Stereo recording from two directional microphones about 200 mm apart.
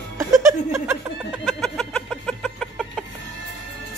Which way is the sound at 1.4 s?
Centre (ahead or behind).